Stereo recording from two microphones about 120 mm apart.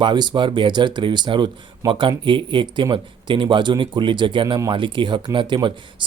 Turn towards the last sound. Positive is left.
turn(degrees=-40)  # may be behind; listen again after turning